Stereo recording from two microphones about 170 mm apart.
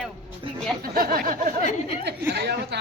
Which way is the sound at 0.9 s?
60° right (ahead or behind).